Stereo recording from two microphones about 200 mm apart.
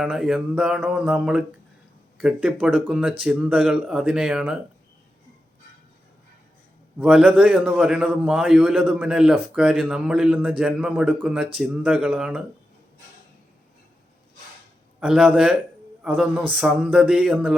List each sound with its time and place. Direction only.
0.0 s a man's voice: 5° right (ahead or behind)
7.0 s a man's voice: 5° right (ahead or behind)
15.0 s a man's voice: 5° right (ahead or behind)